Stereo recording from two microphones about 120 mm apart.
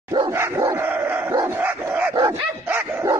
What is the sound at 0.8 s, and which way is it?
Dog, 15° right (ahead or behind).